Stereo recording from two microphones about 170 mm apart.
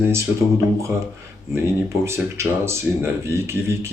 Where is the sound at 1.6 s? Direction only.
15° right (ahead or behind).